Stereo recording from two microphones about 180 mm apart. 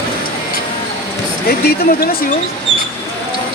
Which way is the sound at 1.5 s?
60° left (ahead or behind).